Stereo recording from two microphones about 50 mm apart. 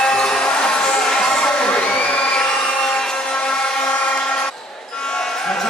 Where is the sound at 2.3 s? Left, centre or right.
Centre.